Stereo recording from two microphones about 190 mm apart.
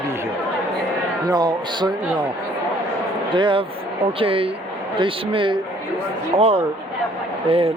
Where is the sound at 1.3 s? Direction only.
20° right (ahead or behind).